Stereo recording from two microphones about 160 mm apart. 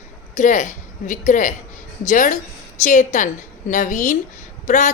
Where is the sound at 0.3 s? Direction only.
50° left (ahead or behind).